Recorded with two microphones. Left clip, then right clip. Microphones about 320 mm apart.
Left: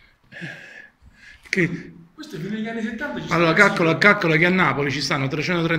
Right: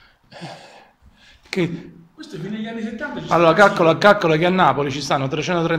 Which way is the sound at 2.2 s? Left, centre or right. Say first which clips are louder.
Even; centre.